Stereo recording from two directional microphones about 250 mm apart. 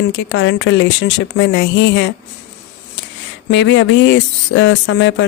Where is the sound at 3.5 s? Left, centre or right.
Left.